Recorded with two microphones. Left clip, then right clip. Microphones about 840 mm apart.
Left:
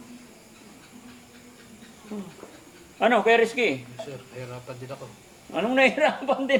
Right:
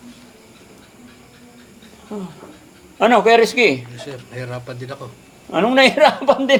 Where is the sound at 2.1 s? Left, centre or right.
Right.